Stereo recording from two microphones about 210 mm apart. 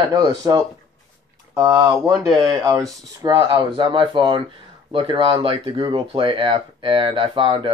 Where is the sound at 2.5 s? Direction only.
15° right (ahead or behind).